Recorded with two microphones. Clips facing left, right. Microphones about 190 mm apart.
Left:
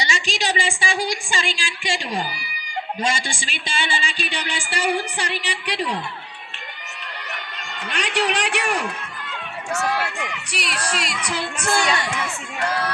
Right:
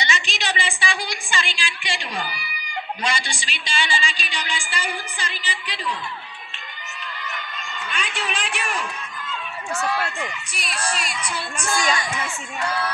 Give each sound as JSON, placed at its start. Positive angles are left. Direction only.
{"t": 0.0, "sound": "a woman's voice", "side_deg": 40}
{"t": 7.9, "sound": "speech", "side_deg": 70}
{"t": 10.1, "sound": "speech", "side_deg": 70}